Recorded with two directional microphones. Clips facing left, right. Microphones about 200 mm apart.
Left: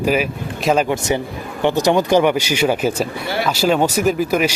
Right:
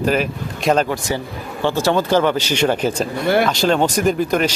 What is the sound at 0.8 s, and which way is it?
A man's voice, 20° left (ahead or behind).